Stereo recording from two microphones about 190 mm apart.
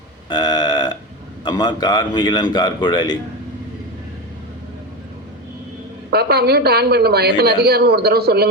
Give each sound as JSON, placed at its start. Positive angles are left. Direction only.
{"t": 0.3, "sound": "a sound", "side_deg": 20}
{"t": 1.5, "sound": "a man's voice", "side_deg": 20}
{"t": 6.1, "sound": "a woman's voice", "side_deg": -55}